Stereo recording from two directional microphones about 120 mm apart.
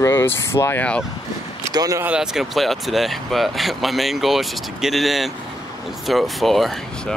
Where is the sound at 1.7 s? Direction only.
30° right (ahead or behind).